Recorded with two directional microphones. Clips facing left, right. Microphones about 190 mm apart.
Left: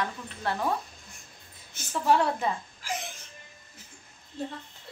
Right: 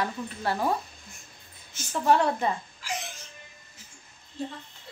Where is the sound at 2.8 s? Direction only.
50° left (ahead or behind).